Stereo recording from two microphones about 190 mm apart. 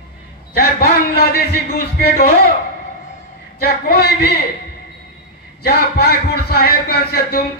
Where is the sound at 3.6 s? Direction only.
55° left (ahead or behind).